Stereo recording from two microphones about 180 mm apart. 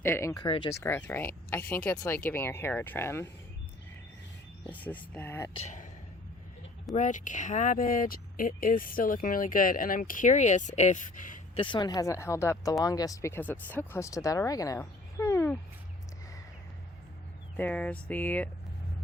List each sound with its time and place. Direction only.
0.0 s speech: 15° left (ahead or behind)
0.7 s speech: 15° left (ahead or behind)
4.7 s speech: 10° left (ahead or behind)
5.5 s speech: 45° left (ahead or behind)
6.9 s speech: 45° left (ahead or behind)
11.5 s speech: 25° left (ahead or behind); by 15.5 s 10° left (ahead or behind)
17.6 s speech: 10° left (ahead or behind)